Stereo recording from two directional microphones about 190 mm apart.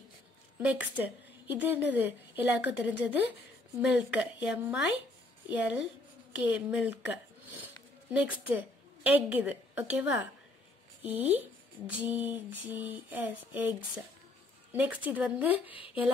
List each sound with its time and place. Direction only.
0.6 s a woman's voice: 10° right (ahead or behind)
6.4 s a woman's voice: 5° right (ahead or behind)